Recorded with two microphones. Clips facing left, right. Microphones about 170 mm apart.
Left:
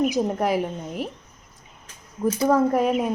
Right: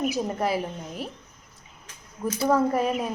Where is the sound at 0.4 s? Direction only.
15° left (ahead or behind).